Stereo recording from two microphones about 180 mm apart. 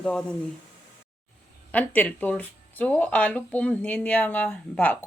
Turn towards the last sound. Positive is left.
turn(degrees=10)  # may be behind; listen again after turning